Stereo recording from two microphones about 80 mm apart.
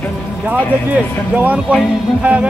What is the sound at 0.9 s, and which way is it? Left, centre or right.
Speech, centre.